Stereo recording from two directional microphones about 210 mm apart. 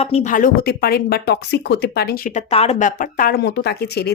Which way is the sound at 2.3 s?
30° left (ahead or behind).